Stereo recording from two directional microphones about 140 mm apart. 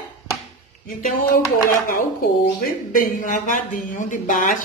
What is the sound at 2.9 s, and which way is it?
A woman's voice, 70° left (ahead or behind).